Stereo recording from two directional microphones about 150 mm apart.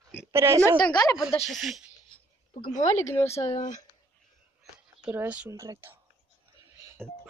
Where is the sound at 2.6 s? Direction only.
55° left (ahead or behind).